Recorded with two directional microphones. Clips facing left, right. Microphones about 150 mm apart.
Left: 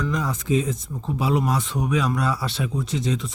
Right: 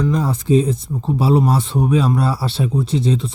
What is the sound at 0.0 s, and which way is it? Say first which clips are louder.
Speech: right 7 dB; 30° right (ahead or behind).